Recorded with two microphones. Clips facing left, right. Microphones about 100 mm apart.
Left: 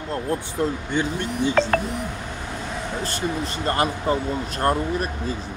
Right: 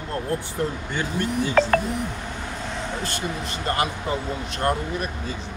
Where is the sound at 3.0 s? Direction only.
35° left (ahead or behind).